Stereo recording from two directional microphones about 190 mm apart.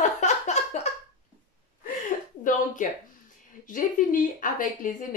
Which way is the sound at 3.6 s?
45° left (ahead or behind).